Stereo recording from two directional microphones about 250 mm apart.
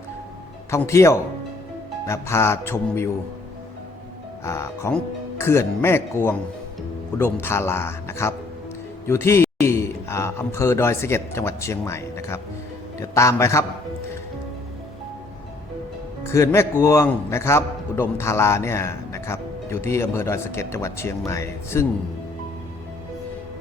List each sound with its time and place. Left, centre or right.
0.7 s a man's voice: centre
4.4 s a man's voice: centre
16.3 s a man's voice: centre